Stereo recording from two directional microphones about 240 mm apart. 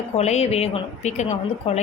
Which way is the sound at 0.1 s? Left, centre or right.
Left.